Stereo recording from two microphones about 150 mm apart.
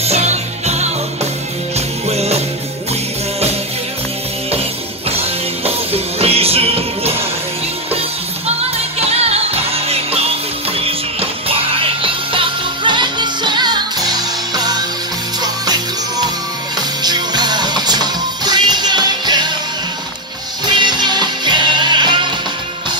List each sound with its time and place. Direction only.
0.0 s music: 45° right (ahead or behind)
2.0 s music: 45° right (ahead or behind)
5.6 s music: 40° right (ahead or behind)
8.5 s music: 45° right (ahead or behind)
20.6 s music: 30° right (ahead or behind)